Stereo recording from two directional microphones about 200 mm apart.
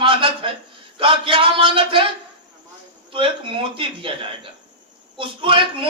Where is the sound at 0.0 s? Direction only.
25° right (ahead or behind).